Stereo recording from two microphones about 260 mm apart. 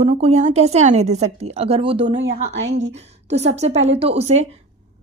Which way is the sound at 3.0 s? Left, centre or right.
Right.